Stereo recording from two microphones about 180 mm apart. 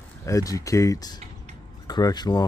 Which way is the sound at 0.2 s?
20° left (ahead or behind).